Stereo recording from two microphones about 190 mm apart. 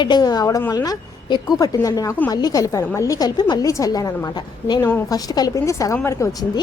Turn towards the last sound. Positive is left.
turn(degrees=20)  # may be behind; listen again after turning